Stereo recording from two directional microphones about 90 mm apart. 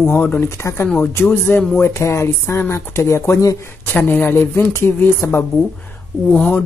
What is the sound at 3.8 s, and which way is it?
Speech, 20° left (ahead or behind).